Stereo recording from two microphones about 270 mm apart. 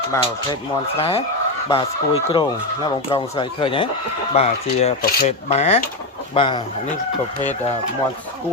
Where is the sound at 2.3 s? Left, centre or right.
Centre.